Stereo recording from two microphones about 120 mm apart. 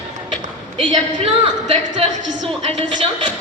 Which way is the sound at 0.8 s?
55° right (ahead or behind).